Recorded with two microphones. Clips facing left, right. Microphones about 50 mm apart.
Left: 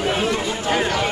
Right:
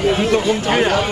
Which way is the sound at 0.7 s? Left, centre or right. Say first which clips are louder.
Right 4 dB; right.